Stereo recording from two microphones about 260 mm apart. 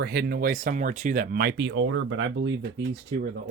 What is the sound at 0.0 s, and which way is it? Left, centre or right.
Speech, right.